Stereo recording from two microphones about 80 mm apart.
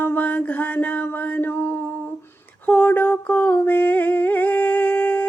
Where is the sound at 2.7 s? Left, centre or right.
Left.